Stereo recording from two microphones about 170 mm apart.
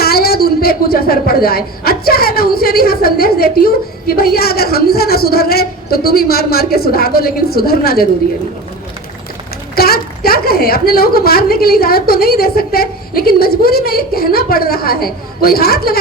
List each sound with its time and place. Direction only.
0.0 s a woman's voice: 65° left (ahead or behind)
9.7 s a woman's voice: 65° left (ahead or behind)